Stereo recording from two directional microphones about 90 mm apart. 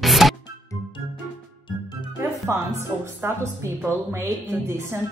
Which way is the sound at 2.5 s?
30° right (ahead or behind).